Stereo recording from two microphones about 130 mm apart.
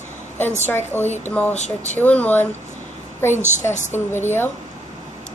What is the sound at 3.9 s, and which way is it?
Speech, 20° left (ahead or behind).